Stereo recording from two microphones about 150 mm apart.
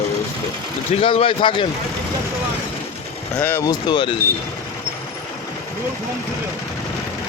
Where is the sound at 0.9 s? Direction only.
40° left (ahead or behind).